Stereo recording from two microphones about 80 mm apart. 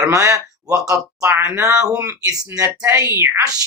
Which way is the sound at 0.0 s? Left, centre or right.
Right.